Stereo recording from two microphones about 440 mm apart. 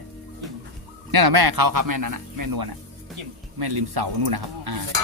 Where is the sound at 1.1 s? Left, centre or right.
Right.